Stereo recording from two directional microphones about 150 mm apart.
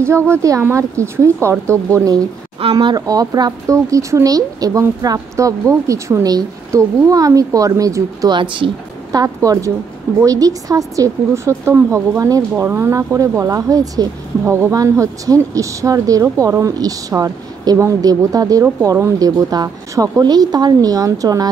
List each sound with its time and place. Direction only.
0.0 s speech: 20° right (ahead or behind); by 9.2 s 35° right (ahead or behind)
9.2 s speech: 20° right (ahead or behind)